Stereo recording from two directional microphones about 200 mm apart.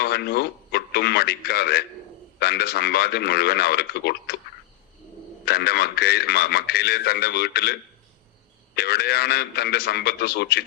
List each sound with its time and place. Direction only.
0.0 s a man's voice: 55° left (ahead or behind)
5.5 s a man's voice: 50° left (ahead or behind)